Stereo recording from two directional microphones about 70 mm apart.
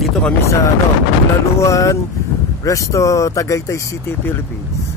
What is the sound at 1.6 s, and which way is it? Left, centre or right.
Speech, left.